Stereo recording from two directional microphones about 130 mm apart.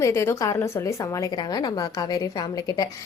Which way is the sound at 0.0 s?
20° left (ahead or behind).